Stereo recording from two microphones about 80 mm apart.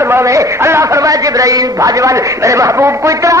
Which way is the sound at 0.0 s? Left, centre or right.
Right.